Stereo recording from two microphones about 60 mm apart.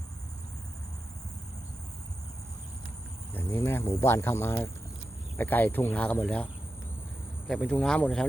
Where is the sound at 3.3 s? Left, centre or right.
Left.